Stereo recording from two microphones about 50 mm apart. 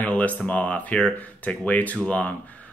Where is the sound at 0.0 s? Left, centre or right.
Left.